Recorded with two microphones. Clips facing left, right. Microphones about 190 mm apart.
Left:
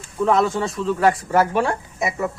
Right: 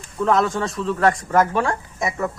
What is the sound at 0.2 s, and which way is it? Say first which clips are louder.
Speech: left 1 dB; centre (ahead or behind).